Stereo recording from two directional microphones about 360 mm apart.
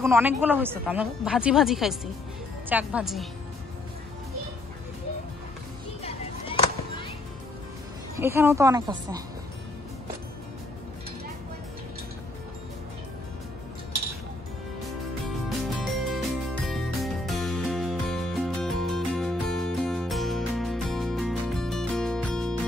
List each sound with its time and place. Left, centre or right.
0.0 s speech: centre
6.0 s a sound: centre
8.2 s a woman's voice: centre
15.8 s music: centre